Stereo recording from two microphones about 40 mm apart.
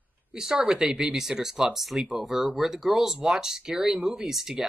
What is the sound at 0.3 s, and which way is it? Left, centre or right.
Speech, centre.